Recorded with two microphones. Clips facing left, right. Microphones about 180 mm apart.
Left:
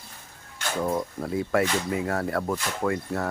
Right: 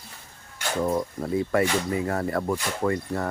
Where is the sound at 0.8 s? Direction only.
Centre (ahead or behind).